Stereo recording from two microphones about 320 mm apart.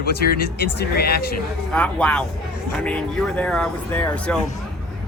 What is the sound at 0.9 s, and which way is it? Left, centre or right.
Speech, left.